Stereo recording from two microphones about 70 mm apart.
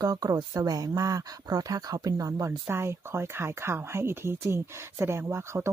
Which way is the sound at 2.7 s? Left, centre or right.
Right.